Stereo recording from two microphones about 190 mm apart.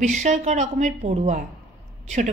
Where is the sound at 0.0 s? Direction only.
40° right (ahead or behind).